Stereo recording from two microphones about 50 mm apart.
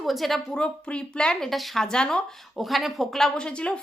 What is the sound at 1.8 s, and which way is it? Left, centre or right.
Speech, centre.